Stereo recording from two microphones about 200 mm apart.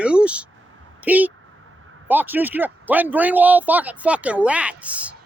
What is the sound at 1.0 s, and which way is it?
Speech, 10° right (ahead or behind).